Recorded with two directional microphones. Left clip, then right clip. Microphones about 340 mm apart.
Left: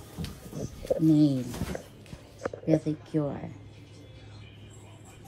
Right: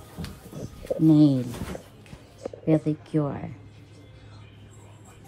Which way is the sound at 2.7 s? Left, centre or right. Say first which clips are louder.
Right 3 dB; right.